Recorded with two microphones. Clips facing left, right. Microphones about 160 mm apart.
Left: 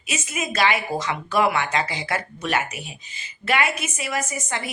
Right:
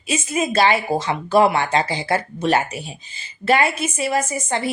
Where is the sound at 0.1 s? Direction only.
30° right (ahead or behind).